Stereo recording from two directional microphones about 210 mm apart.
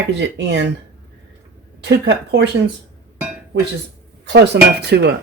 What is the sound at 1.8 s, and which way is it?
Speech, 55° right (ahead or behind).